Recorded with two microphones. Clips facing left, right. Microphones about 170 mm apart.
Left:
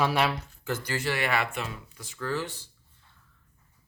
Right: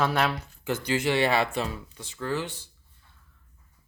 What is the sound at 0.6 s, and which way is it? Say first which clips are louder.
Speech: right 4 dB; 20° right (ahead or behind).